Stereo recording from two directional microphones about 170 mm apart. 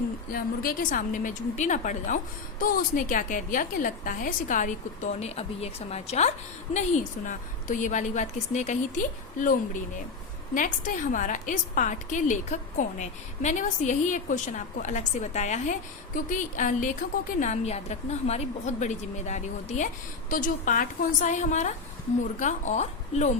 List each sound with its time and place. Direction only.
0.3 s a woman's voice: 60° left (ahead or behind)
5.2 s a woman's voice: 40° left (ahead or behind)